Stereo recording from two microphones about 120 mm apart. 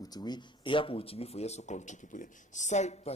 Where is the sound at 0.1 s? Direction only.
35° left (ahead or behind).